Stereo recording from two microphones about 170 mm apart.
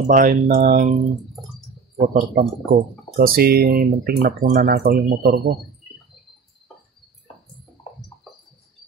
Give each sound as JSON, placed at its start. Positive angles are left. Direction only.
{"t": 0.0, "sound": "speech", "side_deg": -55}
{"t": 2.0, "sound": "speech", "side_deg": -55}